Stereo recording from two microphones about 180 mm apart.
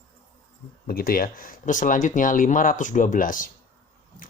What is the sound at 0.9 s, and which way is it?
Speech, 55° left (ahead or behind).